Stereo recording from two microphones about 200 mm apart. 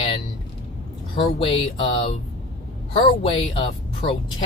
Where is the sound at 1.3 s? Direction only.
25° left (ahead or behind).